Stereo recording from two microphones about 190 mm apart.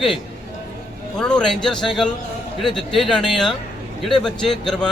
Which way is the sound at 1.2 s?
5° left (ahead or behind).